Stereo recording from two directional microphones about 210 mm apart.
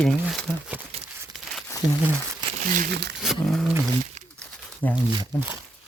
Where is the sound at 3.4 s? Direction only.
Centre (ahead or behind).